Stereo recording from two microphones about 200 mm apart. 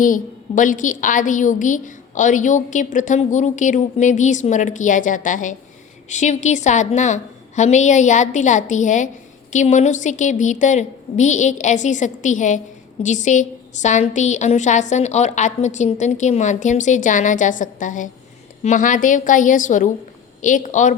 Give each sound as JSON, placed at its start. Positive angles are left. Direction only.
{"t": 0.0, "sound": "a woman's voice", "side_deg": 40}